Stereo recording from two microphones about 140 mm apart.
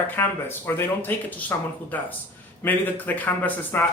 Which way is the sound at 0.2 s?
15° left (ahead or behind).